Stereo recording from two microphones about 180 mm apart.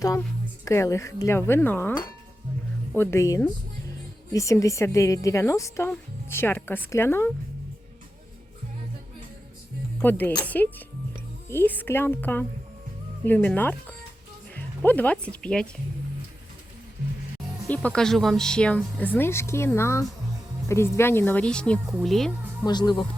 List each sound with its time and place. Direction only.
0.2 s a woman's voice: 15° left (ahead or behind)
10.0 s a woman's voice: 10° left (ahead or behind)
17.7 s a woman's voice: 5° left (ahead or behind)
22.6 s speech: 25° left (ahead or behind)